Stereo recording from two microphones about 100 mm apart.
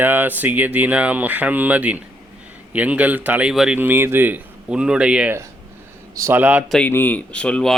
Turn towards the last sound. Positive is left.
turn(degrees=10)  # may be behind; listen again after turning